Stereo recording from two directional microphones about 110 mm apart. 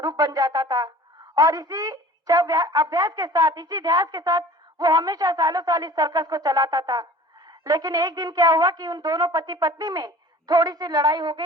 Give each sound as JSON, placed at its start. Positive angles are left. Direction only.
{"t": 0.0, "sound": "speech", "side_deg": -35}